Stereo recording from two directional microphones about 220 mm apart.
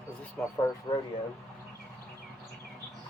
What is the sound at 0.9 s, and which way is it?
Speech, 20° left (ahead or behind).